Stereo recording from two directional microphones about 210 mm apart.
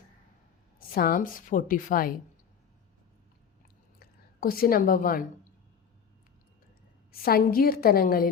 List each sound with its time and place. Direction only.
0.8 s a woman's voice: 45° left (ahead or behind)
4.0 s a woman's voice: 45° left (ahead or behind)
7.1 s a woman's voice: 45° left (ahead or behind)